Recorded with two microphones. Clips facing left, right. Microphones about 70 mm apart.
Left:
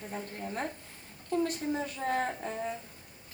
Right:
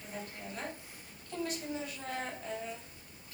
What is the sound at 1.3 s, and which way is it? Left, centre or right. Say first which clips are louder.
A woman's voice: left 7 dB; left.